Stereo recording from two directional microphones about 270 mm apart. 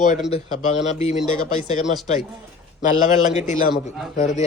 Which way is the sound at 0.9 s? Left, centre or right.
Left.